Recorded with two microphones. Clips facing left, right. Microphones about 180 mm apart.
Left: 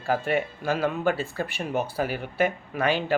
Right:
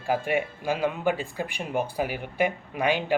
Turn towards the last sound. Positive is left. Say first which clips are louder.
# even
turn(degrees=-15)  # may be behind; listen again after turning